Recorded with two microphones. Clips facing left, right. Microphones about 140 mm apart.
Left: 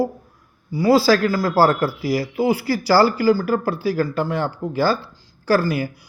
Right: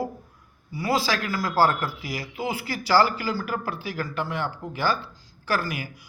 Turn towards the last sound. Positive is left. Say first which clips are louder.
# left 9 dB
turn(degrees=35)  # may be behind; listen again after turning